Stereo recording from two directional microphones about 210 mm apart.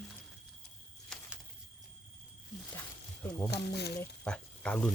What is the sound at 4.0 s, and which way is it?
Speech, 5° left (ahead or behind).